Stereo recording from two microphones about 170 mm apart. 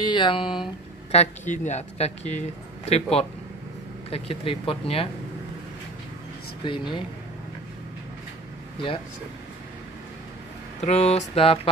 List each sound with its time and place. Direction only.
0.0 s speech: 25° left (ahead or behind)
1.1 s speech: 40° left (ahead or behind)
6.6 s speech: 30° left (ahead or behind)
10.8 s speech: 40° left (ahead or behind)